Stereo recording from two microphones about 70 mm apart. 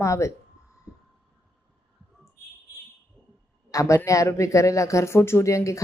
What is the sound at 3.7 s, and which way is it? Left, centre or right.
A man's voice, left.